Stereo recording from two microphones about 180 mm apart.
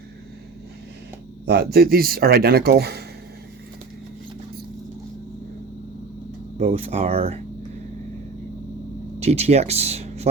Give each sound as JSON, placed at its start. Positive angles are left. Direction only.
{"t": 1.5, "sound": "speech", "side_deg": -60}
{"t": 6.6, "sound": "speech", "side_deg": -35}
{"t": 9.2, "sound": "speech", "side_deg": -35}